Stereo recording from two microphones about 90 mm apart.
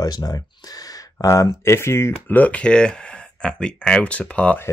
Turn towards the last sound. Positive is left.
turn(degrees=15)  # may be behind; listen again after turning